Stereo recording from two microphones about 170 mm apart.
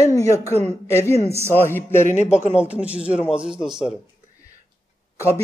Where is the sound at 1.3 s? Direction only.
15° right (ahead or behind).